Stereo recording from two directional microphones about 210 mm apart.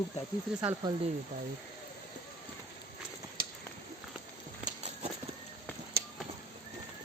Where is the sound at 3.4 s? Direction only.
45° right (ahead or behind).